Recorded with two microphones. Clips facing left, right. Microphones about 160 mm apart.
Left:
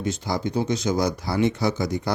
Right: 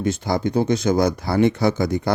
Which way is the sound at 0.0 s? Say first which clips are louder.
Right 5 dB; 55° right (ahead or behind).